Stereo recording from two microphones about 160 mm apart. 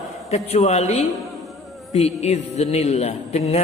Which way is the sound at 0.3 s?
40° left (ahead or behind).